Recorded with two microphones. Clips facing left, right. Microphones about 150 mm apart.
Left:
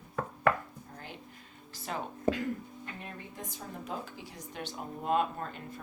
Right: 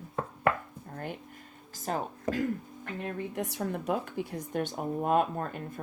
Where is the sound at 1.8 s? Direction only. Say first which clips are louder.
Even; 40° right (ahead or behind).